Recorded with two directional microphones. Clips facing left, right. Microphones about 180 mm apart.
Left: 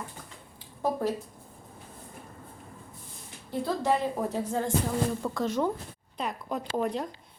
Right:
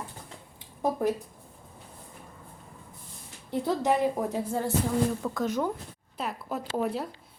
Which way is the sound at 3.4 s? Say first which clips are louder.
Right 1 dB; 20° right (ahead or behind).